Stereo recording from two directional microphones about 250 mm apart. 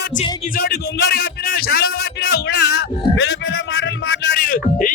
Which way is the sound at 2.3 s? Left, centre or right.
Left.